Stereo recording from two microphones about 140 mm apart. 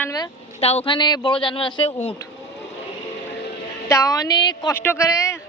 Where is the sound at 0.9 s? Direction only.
30° left (ahead or behind).